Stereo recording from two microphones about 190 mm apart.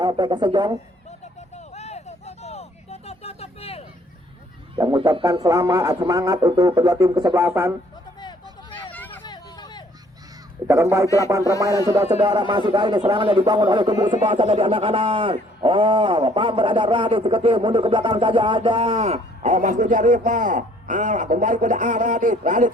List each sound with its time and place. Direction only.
0.0 s a man's voice: 25° right (ahead or behind)
1.5 s a sound: 35° left (ahead or behind)
4.7 s a man's voice: 25° right (ahead or behind)
8.7 s hubbub: 10° left (ahead or behind)
9.2 s vehicle: 20° left (ahead or behind)
10.7 s a man's voice: 15° right (ahead or behind); by 22.7 s 40° right (ahead or behind)